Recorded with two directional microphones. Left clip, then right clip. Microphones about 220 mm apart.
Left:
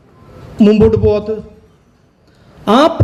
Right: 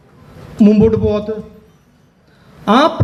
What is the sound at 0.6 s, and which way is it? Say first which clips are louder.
Speech: left 2 dB; 55° left (ahead or behind).